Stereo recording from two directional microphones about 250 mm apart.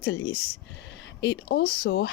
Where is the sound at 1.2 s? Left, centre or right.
Left.